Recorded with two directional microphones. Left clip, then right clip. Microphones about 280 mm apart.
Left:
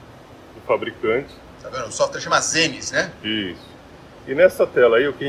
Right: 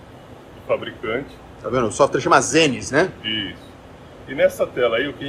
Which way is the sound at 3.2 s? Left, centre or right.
Left.